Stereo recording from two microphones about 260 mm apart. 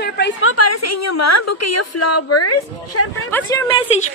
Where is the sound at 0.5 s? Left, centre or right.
Left.